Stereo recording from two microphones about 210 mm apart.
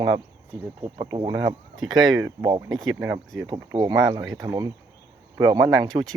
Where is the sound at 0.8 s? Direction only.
20° right (ahead or behind).